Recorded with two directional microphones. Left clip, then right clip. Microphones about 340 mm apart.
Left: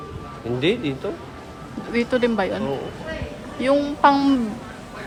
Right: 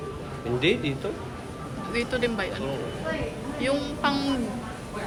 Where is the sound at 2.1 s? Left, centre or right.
Centre.